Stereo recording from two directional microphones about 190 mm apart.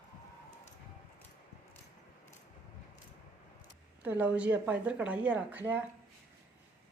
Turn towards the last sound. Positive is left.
turn(degrees=-10)  # may be behind; listen again after turning